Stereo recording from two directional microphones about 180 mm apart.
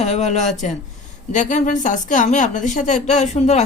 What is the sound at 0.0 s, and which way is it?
A woman's voice, 40° left (ahead or behind).